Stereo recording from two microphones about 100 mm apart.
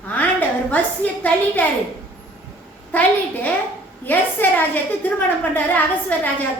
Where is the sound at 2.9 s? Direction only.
15° left (ahead or behind).